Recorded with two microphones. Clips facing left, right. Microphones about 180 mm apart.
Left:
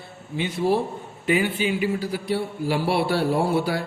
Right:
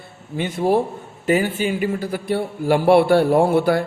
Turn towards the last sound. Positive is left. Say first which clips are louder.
# right 6 dB
turn(degrees=-55)  # may be behind; listen again after turning